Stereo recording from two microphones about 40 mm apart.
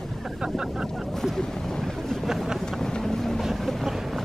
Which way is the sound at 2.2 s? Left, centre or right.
Centre.